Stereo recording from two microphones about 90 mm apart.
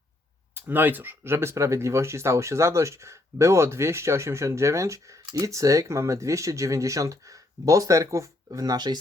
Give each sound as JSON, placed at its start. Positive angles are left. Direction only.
{"t": 0.5, "sound": "speech", "side_deg": -20}